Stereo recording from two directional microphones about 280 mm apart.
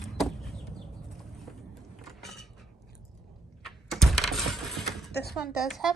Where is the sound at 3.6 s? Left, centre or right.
Centre.